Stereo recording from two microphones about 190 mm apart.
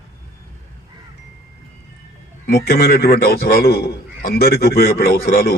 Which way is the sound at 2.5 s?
55° left (ahead or behind).